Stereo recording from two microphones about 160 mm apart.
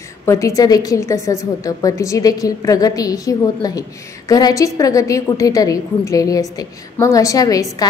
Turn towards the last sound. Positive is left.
turn(degrees=20)  # may be behind; listen again after turning